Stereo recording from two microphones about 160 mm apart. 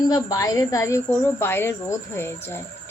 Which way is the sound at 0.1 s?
20° left (ahead or behind).